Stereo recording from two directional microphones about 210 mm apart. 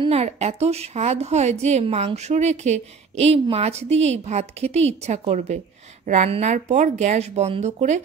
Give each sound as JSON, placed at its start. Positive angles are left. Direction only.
{"t": 0.0, "sound": "a woman's voice", "side_deg": -30}